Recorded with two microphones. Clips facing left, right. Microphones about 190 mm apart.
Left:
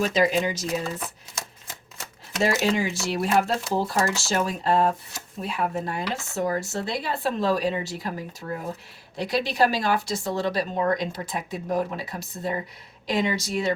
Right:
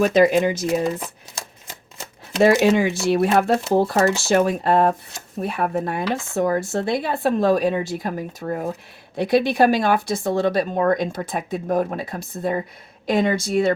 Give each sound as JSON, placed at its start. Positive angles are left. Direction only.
{"t": 0.0, "sound": "speech", "side_deg": -55}
{"t": 1.4, "sound": "typewriter", "side_deg": -30}
{"t": 2.4, "sound": "speech", "side_deg": -60}